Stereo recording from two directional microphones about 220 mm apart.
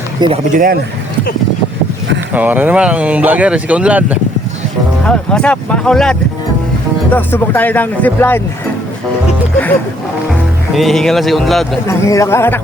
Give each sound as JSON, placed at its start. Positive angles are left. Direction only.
{"t": 0.2, "sound": "speech", "side_deg": -20}
{"t": 0.5, "sound": "speech", "side_deg": -40}
{"t": 2.3, "sound": "speech", "side_deg": -10}
{"t": 5.0, "sound": "speech", "side_deg": 5}
{"t": 10.8, "sound": "speech", "side_deg": 0}
{"t": 11.9, "sound": "speech", "side_deg": 15}